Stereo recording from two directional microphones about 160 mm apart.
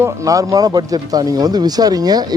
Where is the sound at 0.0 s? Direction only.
20° right (ahead or behind).